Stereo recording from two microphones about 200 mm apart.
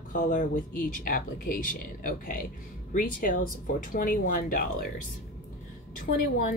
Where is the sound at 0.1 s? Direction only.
40° left (ahead or behind).